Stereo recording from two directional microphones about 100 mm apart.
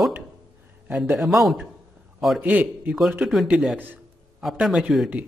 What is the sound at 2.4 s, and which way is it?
A man's voice, 15° right (ahead or behind).